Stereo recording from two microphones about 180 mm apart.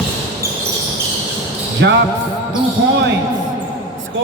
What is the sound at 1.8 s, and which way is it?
Music, 90° right.